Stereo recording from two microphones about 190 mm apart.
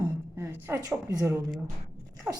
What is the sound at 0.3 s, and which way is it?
A woman's voice, 15° right (ahead or behind).